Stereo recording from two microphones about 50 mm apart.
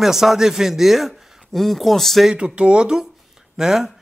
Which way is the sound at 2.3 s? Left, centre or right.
Right.